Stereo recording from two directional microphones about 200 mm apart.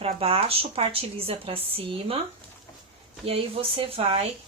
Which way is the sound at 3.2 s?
30° right (ahead or behind).